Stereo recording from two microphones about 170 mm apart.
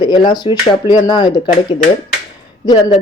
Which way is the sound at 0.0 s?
25° left (ahead or behind).